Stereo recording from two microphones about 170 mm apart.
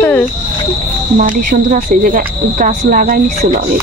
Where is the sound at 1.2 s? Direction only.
50° right (ahead or behind).